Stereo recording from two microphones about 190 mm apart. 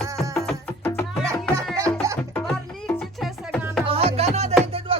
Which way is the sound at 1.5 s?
15° right (ahead or behind).